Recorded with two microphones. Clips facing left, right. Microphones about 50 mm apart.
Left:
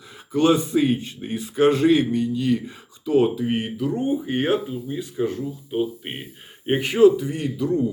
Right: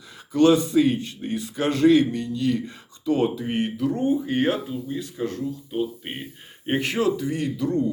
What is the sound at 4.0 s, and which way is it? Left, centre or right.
A man's voice, centre.